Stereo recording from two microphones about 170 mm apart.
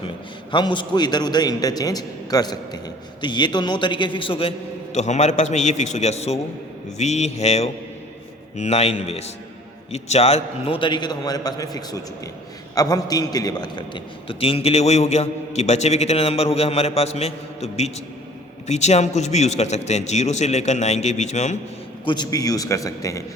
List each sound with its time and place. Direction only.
0.5 s a man's voice: 25° left (ahead or behind); by 21.6 s 45° left (ahead or behind)
22.0 s a man's voice: 25° left (ahead or behind)